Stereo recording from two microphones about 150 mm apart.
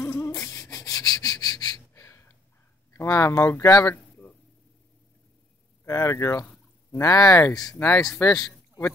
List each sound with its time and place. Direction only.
0.0 s a sound: 15° left (ahead or behind)
2.9 s speech: 20° left (ahead or behind)
5.9 s speech: 20° left (ahead or behind)
7.8 s speech: 5° left (ahead or behind)
8.2 s speech: 20° left (ahead or behind)